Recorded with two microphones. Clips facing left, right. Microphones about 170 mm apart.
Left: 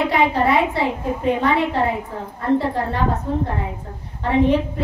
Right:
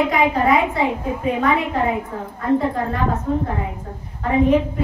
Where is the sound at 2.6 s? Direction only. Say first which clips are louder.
Right 1 dB; 30° left (ahead or behind).